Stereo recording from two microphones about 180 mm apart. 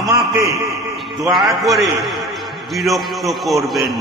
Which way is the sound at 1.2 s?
Centre (ahead or behind).